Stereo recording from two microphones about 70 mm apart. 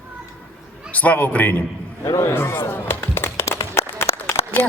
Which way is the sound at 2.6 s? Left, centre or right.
Left.